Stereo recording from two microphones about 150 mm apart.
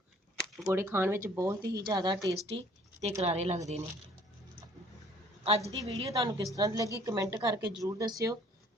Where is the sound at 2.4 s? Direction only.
45° right (ahead or behind).